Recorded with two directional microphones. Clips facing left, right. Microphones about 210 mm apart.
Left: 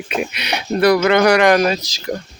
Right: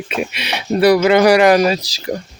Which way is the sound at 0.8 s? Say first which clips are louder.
Right 2 dB; 10° right (ahead or behind).